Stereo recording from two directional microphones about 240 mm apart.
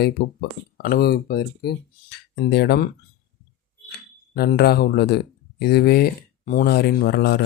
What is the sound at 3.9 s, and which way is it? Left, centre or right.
Speech, left.